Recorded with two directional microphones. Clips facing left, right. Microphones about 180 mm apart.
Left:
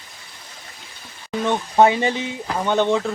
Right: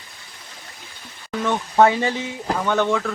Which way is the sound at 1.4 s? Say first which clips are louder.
Left 1 dB; 20° left (ahead or behind).